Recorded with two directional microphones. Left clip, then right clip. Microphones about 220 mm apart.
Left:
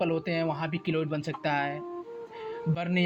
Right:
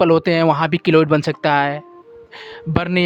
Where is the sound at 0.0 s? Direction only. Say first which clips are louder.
Right 15 dB; 40° right (ahead or behind).